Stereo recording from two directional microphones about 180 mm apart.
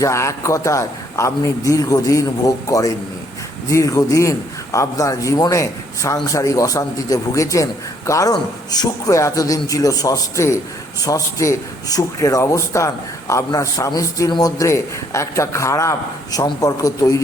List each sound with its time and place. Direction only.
0.0 s a man's voice: 15° left (ahead or behind)